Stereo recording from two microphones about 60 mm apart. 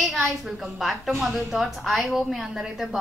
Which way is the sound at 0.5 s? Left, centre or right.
Centre.